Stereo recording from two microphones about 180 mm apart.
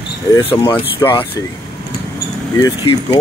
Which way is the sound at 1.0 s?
25° left (ahead or behind).